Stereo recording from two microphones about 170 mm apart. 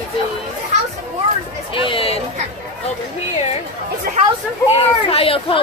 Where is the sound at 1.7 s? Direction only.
30° left (ahead or behind).